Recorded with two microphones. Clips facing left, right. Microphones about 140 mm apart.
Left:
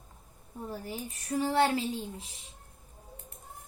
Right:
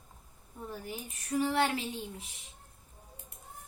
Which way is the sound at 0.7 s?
35° left (ahead or behind).